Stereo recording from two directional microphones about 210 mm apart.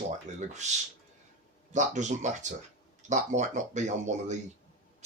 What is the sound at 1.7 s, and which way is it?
Speech, 35° right (ahead or behind).